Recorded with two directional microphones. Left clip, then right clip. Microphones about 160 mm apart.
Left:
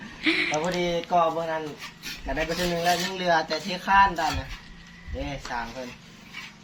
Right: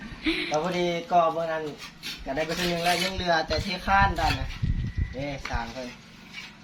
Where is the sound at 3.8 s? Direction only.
35° right (ahead or behind).